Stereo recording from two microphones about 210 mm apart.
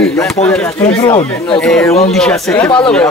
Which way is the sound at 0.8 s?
25° left (ahead or behind).